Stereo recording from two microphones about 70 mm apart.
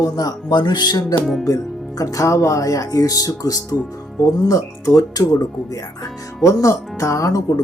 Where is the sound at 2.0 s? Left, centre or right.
Left.